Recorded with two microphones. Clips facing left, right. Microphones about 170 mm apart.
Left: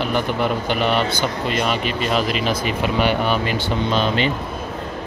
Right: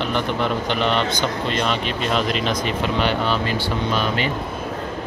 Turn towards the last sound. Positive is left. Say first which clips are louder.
# left 3 dB
turn(degrees=25)  # may be behind; listen again after turning